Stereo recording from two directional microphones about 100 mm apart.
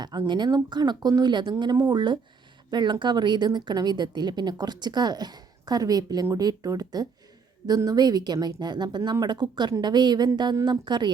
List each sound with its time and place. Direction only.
0.0 s a woman's voice: 45° right (ahead or behind)